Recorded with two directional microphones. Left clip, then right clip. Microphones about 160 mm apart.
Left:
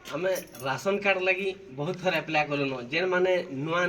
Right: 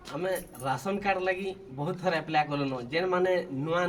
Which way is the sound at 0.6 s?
30° right (ahead or behind).